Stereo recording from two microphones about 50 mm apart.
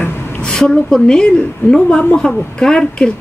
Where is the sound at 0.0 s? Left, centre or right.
Left.